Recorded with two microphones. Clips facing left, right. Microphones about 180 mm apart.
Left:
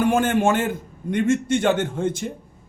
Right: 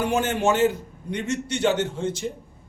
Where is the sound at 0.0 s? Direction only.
50° left (ahead or behind).